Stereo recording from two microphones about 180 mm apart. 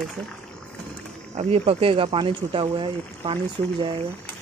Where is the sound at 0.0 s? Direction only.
Centre (ahead or behind).